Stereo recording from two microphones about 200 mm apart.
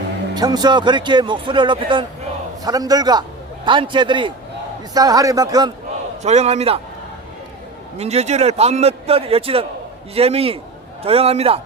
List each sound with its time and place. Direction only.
0.3 s speech: 20° right (ahead or behind)
6.2 s a man's voice: 35° right (ahead or behind)
7.9 s a man's voice: 30° right (ahead or behind)